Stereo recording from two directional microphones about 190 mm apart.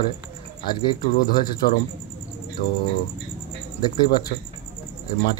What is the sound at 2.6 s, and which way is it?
Speech, 50° left (ahead or behind).